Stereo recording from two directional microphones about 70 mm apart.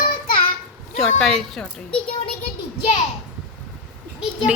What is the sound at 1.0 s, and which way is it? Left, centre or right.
Speech, centre.